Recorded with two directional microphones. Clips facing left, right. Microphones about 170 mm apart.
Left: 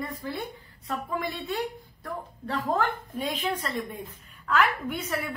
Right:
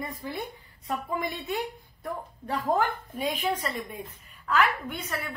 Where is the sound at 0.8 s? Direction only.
20° right (ahead or behind).